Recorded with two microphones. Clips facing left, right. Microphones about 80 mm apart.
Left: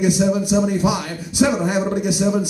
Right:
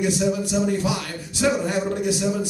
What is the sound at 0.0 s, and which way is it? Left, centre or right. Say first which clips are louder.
A man's voice: left 4 dB; centre.